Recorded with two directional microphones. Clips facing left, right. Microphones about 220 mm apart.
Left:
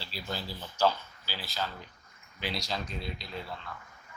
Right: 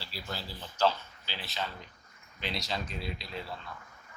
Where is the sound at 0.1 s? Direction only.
20° left (ahead or behind).